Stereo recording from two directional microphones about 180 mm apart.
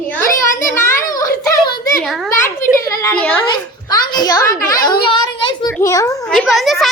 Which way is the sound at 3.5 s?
25° left (ahead or behind).